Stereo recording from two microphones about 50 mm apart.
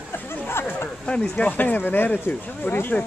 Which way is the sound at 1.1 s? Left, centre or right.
Left.